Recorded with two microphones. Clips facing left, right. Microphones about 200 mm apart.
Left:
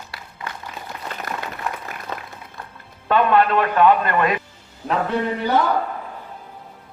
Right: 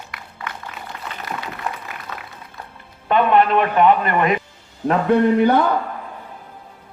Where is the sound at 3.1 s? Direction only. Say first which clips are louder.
Right 1 dB; 20° right (ahead or behind).